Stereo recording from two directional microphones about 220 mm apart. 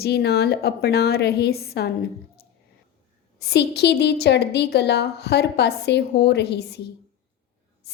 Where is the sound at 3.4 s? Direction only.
50° left (ahead or behind).